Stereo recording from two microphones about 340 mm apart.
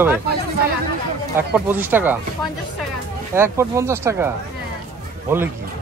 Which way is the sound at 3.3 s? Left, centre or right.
Centre.